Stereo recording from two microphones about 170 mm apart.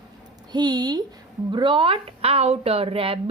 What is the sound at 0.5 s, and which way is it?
A woman's voice, 25° right (ahead or behind).